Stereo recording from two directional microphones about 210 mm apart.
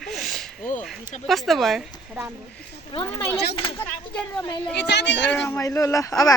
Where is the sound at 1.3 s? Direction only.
Centre (ahead or behind).